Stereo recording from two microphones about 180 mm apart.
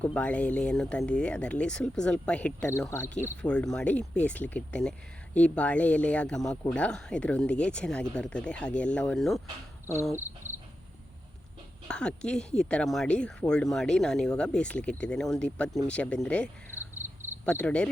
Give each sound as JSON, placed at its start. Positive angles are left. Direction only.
{"t": 0.0, "sound": "speech", "side_deg": 5}
{"t": 9.8, "sound": "cricket", "side_deg": 15}
{"t": 10.2, "sound": "cricket", "side_deg": -10}
{"t": 11.9, "sound": "speech", "side_deg": 5}
{"t": 16.7, "sound": "cricket", "side_deg": -10}
{"t": 17.4, "sound": "speech", "side_deg": 5}